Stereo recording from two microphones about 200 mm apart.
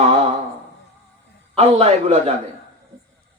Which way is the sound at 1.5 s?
30° right (ahead or behind).